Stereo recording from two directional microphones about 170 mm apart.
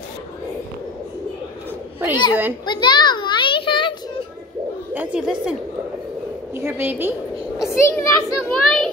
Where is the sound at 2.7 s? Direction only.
25° left (ahead or behind).